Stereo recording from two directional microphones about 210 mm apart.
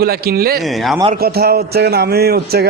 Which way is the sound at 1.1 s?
45° right (ahead or behind).